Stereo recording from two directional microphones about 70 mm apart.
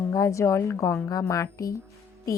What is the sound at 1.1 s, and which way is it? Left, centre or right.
Speech, left.